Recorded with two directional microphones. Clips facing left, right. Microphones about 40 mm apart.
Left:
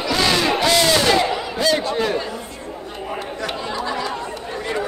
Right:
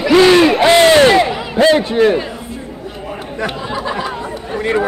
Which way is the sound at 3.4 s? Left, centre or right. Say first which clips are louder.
Right 6 dB; right.